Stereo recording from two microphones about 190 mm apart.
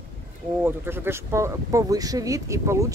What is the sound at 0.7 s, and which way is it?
Speech, 10° right (ahead or behind).